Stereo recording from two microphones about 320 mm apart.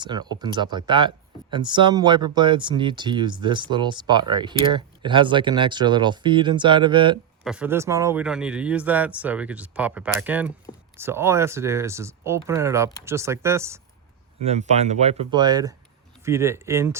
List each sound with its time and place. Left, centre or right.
0.0 s speech: centre
7.4 s speech: centre
14.4 s speech: right